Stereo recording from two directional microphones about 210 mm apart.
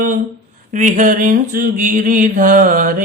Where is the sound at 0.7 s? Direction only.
35° right (ahead or behind).